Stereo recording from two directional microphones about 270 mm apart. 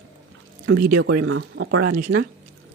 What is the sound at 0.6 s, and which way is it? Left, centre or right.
Speech, right.